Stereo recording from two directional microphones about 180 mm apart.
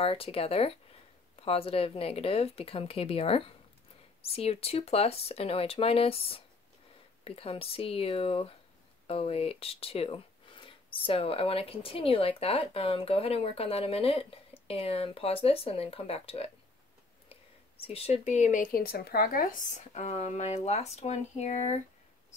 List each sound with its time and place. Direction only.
0.0 s speech: 30° left (ahead or behind)
17.9 s speech: 35° left (ahead or behind)